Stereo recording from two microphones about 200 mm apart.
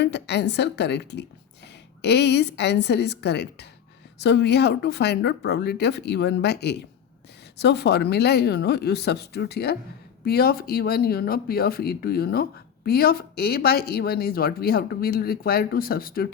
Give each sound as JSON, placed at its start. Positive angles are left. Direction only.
{"t": 0.0, "sound": "a woman's voice", "side_deg": 60}